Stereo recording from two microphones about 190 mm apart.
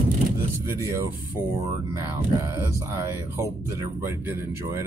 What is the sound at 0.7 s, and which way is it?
Speech, 15° right (ahead or behind).